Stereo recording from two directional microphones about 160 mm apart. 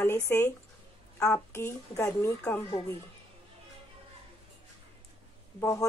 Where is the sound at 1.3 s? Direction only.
15° left (ahead or behind).